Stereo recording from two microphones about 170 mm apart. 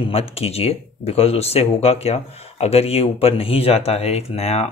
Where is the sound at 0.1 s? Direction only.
35° left (ahead or behind).